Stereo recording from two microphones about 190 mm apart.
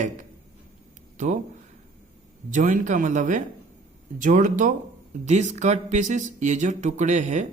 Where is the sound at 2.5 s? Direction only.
45° right (ahead or behind).